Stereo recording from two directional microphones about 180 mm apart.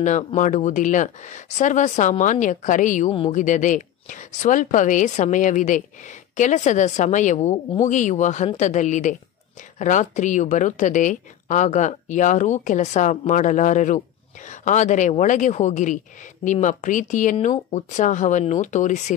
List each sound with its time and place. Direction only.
0.0 s a woman's voice: 40° left (ahead or behind)